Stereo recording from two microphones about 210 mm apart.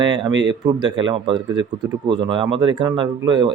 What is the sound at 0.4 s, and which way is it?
Speech, 20° right (ahead or behind).